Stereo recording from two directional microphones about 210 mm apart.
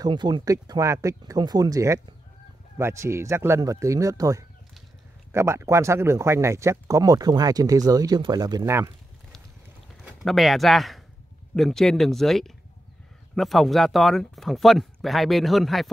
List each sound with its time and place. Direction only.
0.0 s speech: 20° right (ahead or behind)
10.0 s speech: centre (ahead or behind)